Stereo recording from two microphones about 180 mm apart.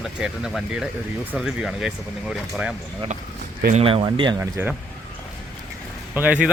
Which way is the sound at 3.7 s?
30° right (ahead or behind).